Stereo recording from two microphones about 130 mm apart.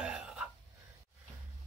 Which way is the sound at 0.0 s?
5° right (ahead or behind).